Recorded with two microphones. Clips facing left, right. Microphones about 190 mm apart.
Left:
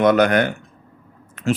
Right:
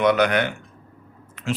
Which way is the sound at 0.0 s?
45° left (ahead or behind).